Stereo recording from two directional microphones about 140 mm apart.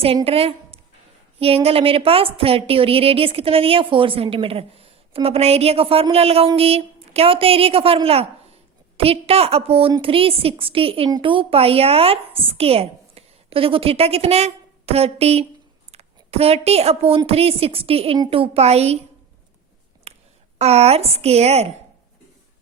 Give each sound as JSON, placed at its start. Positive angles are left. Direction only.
{"t": 0.3, "sound": "a woman's voice", "side_deg": -45}
{"t": 20.1, "sound": "a sound", "side_deg": -45}
{"t": 20.6, "sound": "a woman's voice", "side_deg": -50}